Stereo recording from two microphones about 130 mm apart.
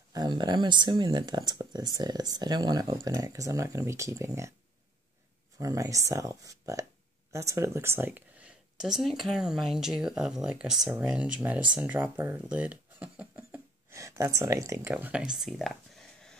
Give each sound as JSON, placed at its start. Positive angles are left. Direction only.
{"t": 0.1, "sound": "speech", "side_deg": -30}
{"t": 5.6, "sound": "speech", "side_deg": -25}
{"t": 13.4, "sound": "a sound", "side_deg": -20}
{"t": 14.9, "sound": "speech", "side_deg": -10}